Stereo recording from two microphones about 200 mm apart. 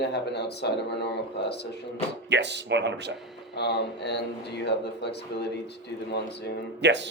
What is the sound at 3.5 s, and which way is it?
A man's voice, 60° left (ahead or behind).